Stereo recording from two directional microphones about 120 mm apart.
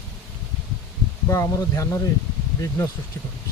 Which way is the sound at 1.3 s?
25° left (ahead or behind).